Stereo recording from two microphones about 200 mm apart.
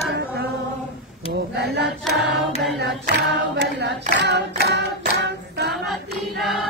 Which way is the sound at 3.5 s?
60° right (ahead or behind).